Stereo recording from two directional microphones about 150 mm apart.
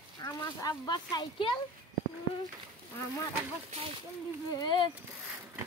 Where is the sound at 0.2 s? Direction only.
20° left (ahead or behind).